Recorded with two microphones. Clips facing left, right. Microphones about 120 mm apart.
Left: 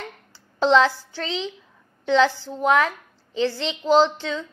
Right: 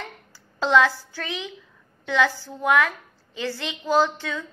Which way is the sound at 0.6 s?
25° left (ahead or behind).